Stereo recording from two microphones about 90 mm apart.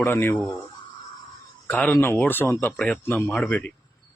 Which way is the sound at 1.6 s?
15° left (ahead or behind).